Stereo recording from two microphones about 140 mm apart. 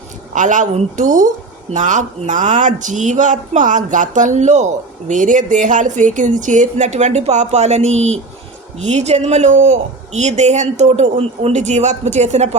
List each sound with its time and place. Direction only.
0.3 s speech: 65° right (ahead or behind)